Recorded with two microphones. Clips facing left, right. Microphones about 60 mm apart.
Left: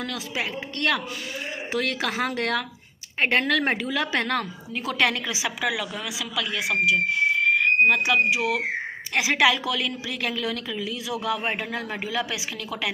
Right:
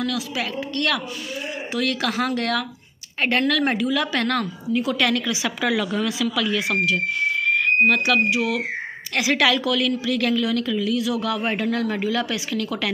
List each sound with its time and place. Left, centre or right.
0.0 s a woman's voice: left
5.6 s a woman's voice: centre